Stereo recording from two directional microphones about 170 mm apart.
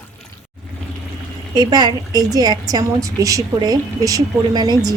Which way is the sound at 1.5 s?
25° right (ahead or behind).